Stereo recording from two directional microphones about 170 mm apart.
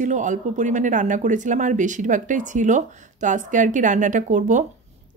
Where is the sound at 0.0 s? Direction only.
45° right (ahead or behind).